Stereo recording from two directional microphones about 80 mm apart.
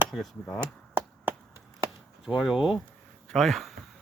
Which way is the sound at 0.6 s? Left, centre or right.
Right.